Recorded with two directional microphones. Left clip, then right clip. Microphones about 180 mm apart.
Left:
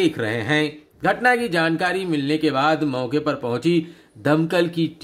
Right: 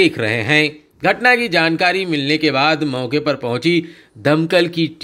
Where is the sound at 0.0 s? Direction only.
20° right (ahead or behind).